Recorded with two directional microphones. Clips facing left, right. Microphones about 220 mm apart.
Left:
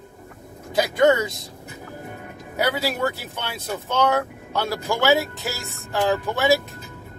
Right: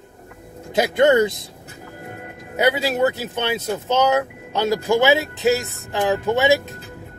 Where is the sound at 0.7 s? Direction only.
25° right (ahead or behind).